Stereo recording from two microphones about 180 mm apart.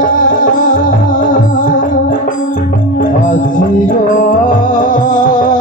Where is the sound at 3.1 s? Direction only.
50° left (ahead or behind).